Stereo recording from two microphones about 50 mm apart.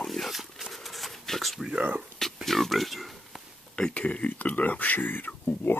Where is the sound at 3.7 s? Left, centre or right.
Left.